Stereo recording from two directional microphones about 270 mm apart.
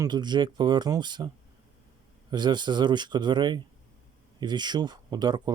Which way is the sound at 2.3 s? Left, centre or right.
Centre.